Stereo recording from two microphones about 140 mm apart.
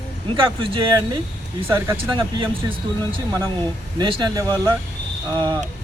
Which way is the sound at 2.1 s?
35° right (ahead or behind).